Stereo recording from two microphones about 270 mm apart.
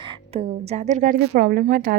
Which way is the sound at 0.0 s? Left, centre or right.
Right.